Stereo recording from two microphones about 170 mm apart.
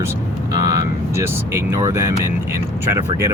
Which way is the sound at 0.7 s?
15° right (ahead or behind).